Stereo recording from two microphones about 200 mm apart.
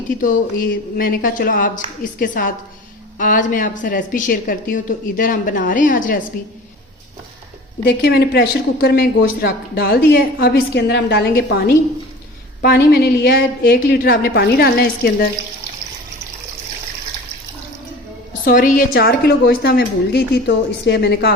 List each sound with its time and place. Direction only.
0.2 s a woman's voice: 45° left (ahead or behind)
7.9 s a woman's voice: 55° left (ahead or behind)
18.4 s a woman's voice: 40° left (ahead or behind)